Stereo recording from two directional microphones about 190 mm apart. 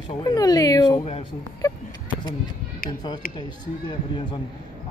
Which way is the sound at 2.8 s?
20° left (ahead or behind).